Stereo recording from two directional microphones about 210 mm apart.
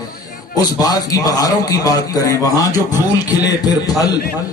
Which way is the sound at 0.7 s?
15° left (ahead or behind).